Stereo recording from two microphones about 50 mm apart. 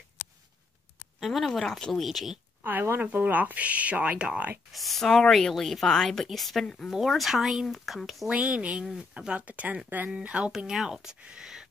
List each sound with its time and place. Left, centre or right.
1.4 s speech: centre
2.6 s speech: right
4.7 s speech: centre
8.3 s speech: right
10.1 s speech: right
10.7 s speech: centre